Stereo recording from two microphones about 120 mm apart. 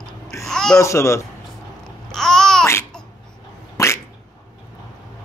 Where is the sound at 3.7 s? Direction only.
20° left (ahead or behind).